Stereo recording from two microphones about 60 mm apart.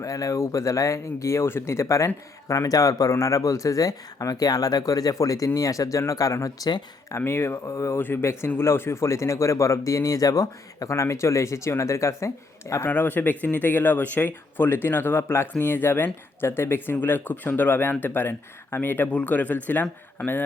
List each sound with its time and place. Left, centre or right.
0.0 s speech: left
2.5 s speech: left
7.3 s speech: left
12.9 s speech: left
19.1 s a man's voice: left